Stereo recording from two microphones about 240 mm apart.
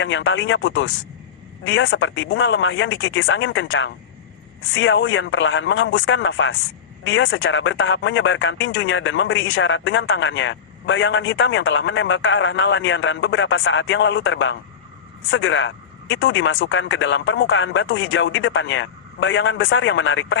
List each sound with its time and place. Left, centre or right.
0.0 s speech: left